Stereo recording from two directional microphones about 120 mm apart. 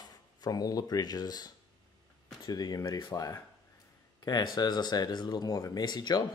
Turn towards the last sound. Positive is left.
turn(degrees=35)  # may be behind; listen again after turning